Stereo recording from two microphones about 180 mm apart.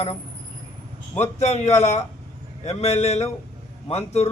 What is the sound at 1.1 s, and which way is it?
A man's voice, 35° left (ahead or behind).